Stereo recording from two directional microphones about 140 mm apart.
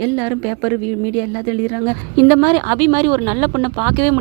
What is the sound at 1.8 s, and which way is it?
Speech, 20° right (ahead or behind).